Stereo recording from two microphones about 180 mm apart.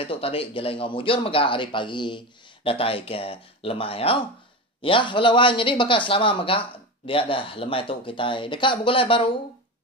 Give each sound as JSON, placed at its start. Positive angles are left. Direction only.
{"t": 0.0, "sound": "speech", "side_deg": 30}